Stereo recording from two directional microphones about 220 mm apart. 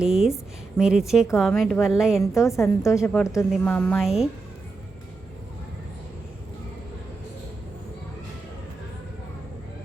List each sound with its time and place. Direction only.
0.0 s a woman's voice: centre (ahead or behind)
2.3 s a woman's voice: 15° left (ahead or behind)